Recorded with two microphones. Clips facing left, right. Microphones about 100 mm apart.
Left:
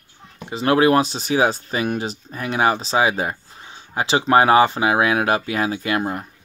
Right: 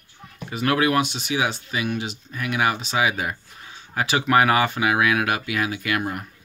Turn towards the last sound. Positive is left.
turn(degrees=25)  # may be behind; listen again after turning